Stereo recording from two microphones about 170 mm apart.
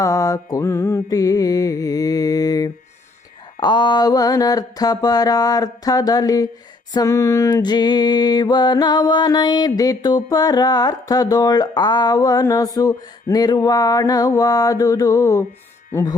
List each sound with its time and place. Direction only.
0.0 s music: 20° left (ahead or behind)
15.9 s speech: 15° left (ahead or behind)